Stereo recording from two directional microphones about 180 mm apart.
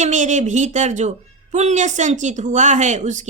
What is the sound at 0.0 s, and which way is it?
A woman's voice, 40° right (ahead or behind).